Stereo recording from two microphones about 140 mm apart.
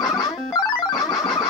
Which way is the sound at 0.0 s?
30° left (ahead or behind).